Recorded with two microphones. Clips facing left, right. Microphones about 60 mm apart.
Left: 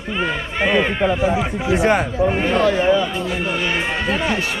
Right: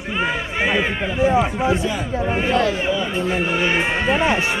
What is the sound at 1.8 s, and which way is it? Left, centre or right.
Speech, left.